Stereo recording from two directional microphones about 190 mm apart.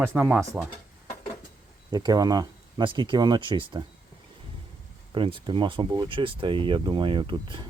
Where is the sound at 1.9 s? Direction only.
20° right (ahead or behind).